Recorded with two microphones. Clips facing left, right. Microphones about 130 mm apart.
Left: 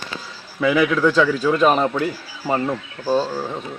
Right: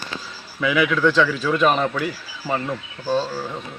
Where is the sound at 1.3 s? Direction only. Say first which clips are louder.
Left 3 dB; 35° left (ahead or behind).